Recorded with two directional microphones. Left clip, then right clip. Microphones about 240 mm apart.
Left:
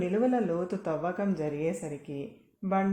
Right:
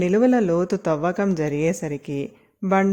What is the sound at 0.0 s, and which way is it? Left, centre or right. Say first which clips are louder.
A woman's voice: right 9 dB; right.